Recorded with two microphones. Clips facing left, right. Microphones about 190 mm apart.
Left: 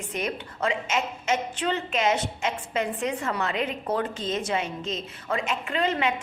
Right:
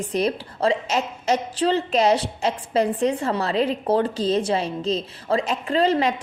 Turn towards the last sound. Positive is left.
turn(degrees=-35)  # may be behind; listen again after turning